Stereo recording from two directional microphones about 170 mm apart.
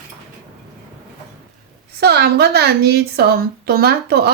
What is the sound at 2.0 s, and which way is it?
A woman's voice, 70° right (ahead or behind).